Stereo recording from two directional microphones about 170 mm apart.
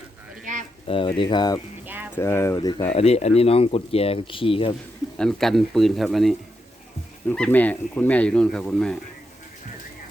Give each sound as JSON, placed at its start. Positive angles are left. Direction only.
{"t": 0.9, "sound": "speech", "side_deg": 30}
{"t": 2.6, "sound": "speech", "side_deg": 25}
{"t": 2.9, "sound": "speech", "side_deg": 35}
{"t": 5.1, "sound": "speech", "side_deg": 5}